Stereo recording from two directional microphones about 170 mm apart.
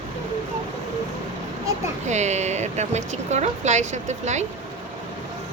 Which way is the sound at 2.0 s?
45° right (ahead or behind).